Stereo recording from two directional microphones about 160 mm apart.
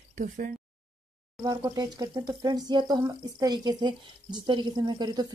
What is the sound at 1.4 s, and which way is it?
Speech, 25° right (ahead or behind).